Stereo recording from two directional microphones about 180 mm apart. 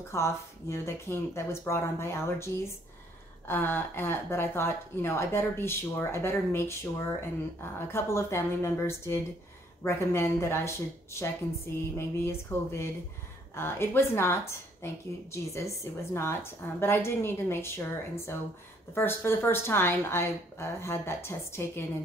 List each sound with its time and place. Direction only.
0.1 s speech: 15° left (ahead or behind)